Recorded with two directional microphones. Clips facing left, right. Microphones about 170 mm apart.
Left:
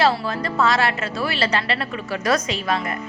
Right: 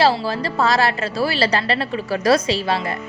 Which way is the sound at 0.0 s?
30° right (ahead or behind).